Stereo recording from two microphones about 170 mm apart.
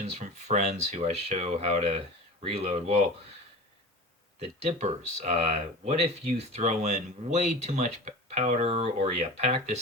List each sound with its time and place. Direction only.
0.0 s speech: 45° right (ahead or behind)
4.4 s speech: 40° right (ahead or behind)